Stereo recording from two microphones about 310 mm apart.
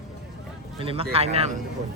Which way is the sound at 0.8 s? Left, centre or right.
Centre.